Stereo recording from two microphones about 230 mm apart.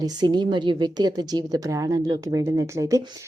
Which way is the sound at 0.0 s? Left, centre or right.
Centre.